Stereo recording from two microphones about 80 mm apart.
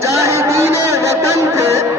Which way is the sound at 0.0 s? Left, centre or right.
Right.